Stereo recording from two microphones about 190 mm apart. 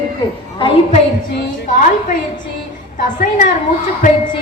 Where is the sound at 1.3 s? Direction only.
45° left (ahead or behind).